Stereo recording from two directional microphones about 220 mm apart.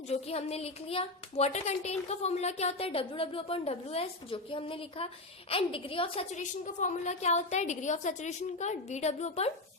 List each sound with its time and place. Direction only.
0.1 s a woman's voice: 30° left (ahead or behind)